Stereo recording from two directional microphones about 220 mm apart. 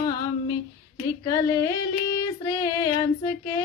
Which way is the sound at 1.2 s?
15° left (ahead or behind).